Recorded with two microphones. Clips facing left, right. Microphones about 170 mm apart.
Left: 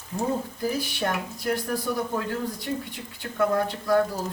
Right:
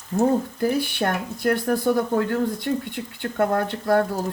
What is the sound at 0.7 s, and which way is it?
Speech, 60° right (ahead or behind).